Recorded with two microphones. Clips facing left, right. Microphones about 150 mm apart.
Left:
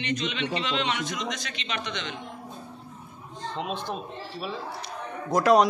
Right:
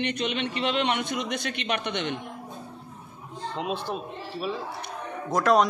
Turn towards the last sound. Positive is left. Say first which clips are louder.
# left 2 dB
turn(degrees=0)  # may be behind; listen again after turning